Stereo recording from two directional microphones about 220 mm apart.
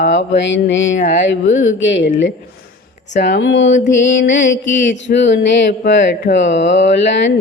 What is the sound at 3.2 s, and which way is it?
Mantra, 55° left (ahead or behind).